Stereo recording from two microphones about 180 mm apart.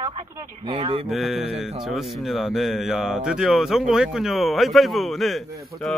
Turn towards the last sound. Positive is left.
turn(degrees=0)  # may be behind; listen again after turning